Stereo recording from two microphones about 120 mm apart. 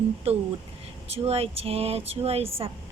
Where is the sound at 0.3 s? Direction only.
55° right (ahead or behind).